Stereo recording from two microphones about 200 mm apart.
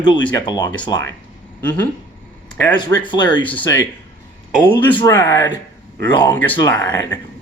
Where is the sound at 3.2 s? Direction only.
10° left (ahead or behind).